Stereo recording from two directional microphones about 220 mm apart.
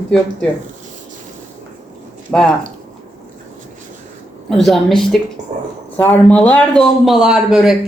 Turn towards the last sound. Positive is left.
turn(degrees=0)  # may be behind; listen again after turning